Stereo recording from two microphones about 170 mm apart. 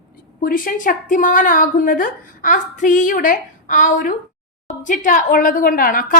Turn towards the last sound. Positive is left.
turn(degrees=55)  # may be behind; listen again after turning